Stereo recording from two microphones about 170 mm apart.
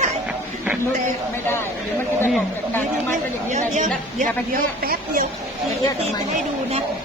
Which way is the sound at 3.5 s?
45° right (ahead or behind).